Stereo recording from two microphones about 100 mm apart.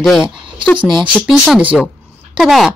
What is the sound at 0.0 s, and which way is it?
Speech, centre (ahead or behind).